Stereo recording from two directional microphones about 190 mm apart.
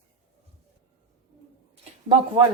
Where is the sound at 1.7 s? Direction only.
30° right (ahead or behind).